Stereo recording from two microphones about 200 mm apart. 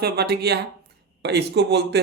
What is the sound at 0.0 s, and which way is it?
Speech, 55° right (ahead or behind).